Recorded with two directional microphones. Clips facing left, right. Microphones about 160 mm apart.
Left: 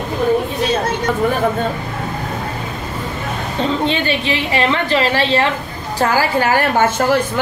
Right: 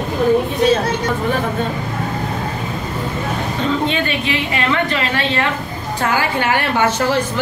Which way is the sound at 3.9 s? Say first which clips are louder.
Left 1 dB; 30° left (ahead or behind).